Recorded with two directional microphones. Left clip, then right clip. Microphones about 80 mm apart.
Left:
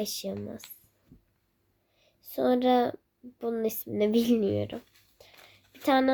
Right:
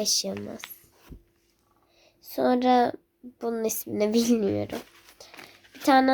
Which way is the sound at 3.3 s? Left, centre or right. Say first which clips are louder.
Right 2 dB; left.